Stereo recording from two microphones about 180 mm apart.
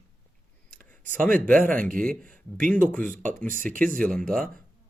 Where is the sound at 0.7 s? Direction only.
50° right (ahead or behind).